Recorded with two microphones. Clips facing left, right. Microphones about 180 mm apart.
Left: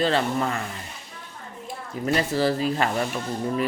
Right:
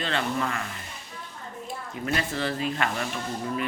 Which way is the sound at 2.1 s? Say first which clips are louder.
Left 6 dB; 35° left (ahead or behind).